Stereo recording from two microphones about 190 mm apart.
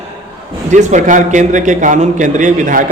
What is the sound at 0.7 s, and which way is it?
A man's voice, 40° right (ahead or behind).